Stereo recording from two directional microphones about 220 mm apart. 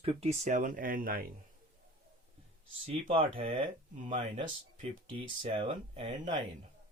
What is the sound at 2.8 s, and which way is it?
Speech, 25° right (ahead or behind).